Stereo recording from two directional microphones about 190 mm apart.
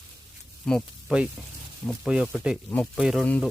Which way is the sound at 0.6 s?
5° left (ahead or behind).